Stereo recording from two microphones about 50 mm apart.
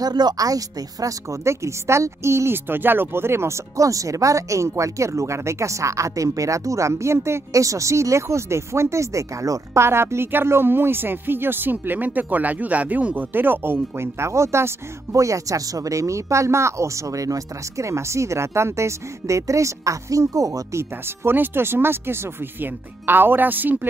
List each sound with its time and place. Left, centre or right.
1.3 s speech: right
2.5 s speech: right
13.9 s speech: right
15.1 s speech: right
17.7 s speech: right
21.3 s speech: right